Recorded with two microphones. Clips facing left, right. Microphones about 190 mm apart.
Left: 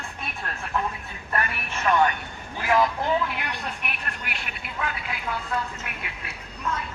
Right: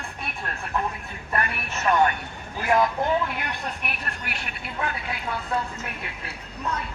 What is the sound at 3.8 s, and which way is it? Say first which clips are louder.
Speech: right 1 dB; 40° right (ahead or behind).